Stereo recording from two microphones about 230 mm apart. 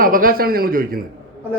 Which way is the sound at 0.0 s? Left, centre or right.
Right.